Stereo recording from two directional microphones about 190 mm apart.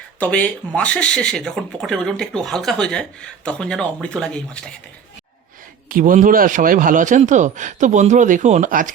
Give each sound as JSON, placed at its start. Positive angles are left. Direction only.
{"t": 0.2, "sound": "speech", "side_deg": 5}
{"t": 5.9, "sound": "a man's voice", "side_deg": -45}